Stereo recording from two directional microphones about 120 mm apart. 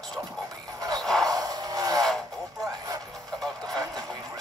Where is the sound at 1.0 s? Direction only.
5° left (ahead or behind).